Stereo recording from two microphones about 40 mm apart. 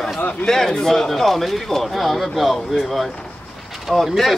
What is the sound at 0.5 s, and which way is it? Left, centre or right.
Speech, centre.